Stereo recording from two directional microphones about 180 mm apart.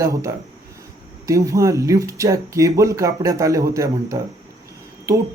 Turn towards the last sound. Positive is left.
turn(degrees=-15)  # may be behind; listen again after turning